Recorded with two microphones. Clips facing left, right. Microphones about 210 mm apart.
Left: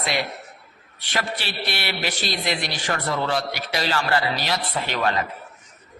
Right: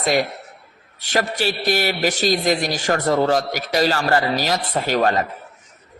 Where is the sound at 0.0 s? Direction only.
45° right (ahead or behind).